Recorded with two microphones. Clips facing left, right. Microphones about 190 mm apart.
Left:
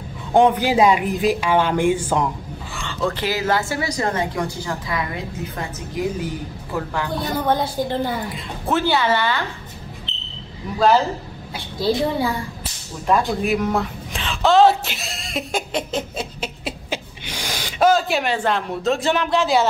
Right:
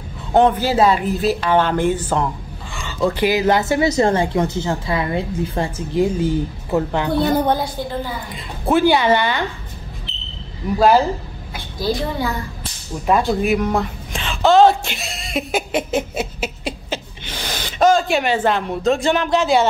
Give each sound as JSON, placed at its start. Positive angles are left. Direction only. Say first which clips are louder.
{"t": 0.3, "sound": "speech", "louder": "right 1 dB", "side_deg": 10}
{"t": 2.7, "sound": "a woman's voice", "louder": "right 4 dB", "side_deg": -5}
{"t": 8.6, "sound": "speech", "louder": "right 5 dB", "side_deg": -10}
{"t": 11.5, "sound": "a woman's voice", "louder": "left 1 dB", "side_deg": 30}
{"t": 13.4, "sound": "speech", "louder": "right 2 dB", "side_deg": 0}
{"t": 16.9, "sound": "speech", "louder": "right 1 dB", "side_deg": 10}